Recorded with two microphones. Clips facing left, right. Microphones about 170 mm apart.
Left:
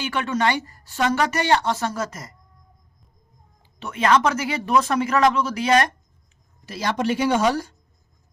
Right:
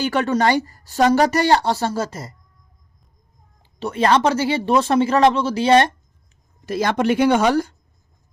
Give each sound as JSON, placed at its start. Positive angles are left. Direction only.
{"t": 0.0, "sound": "a woman's voice", "side_deg": -40}
{"t": 3.8, "sound": "speech", "side_deg": -35}
{"t": 6.7, "sound": "speech", "side_deg": -50}